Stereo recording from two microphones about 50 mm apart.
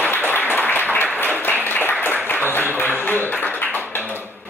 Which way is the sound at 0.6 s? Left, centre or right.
Left.